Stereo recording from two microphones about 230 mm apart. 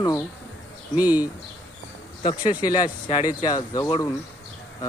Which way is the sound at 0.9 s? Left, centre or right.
Centre.